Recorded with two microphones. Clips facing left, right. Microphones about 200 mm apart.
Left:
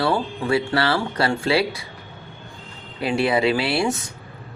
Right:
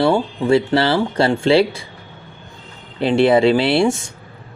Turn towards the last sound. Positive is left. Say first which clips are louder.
# right 6 dB
turn(degrees=-25)  # may be behind; listen again after turning